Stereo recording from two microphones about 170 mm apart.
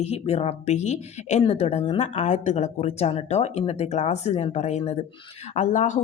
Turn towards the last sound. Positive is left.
turn(degrees=45)  # may be behind; listen again after turning